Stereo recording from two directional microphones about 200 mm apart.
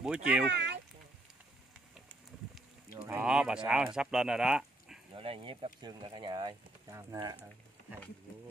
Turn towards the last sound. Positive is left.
turn(degrees=-20)  # may be behind; listen again after turning